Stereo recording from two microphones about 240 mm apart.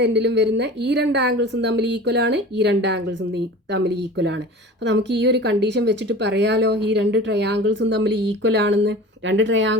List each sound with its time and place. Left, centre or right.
0.0 s speech: right